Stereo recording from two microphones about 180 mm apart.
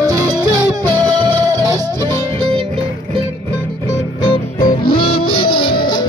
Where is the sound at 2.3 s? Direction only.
30° right (ahead or behind).